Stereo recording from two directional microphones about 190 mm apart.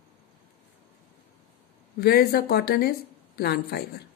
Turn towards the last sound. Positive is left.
turn(degrees=55)  # may be behind; listen again after turning